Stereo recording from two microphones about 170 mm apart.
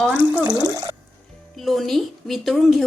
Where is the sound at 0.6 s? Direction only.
20° right (ahead or behind).